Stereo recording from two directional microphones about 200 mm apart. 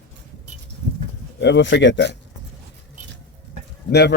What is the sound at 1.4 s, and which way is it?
Speech, 60° left (ahead or behind).